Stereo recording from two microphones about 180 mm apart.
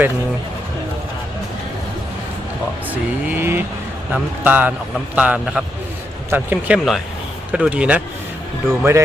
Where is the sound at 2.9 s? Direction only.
10° right (ahead or behind).